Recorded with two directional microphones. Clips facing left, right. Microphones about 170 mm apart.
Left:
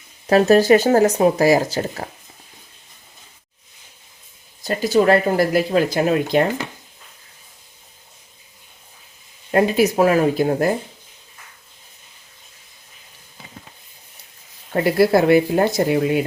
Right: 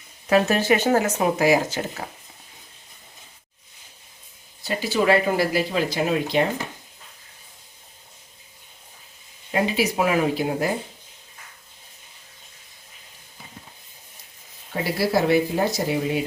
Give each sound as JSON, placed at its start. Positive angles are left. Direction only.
{"t": 0.3, "sound": "speech", "side_deg": 35}
{"t": 4.6, "sound": "speech", "side_deg": 45}
{"t": 9.5, "sound": "speech", "side_deg": 50}
{"t": 14.7, "sound": "speech", "side_deg": 55}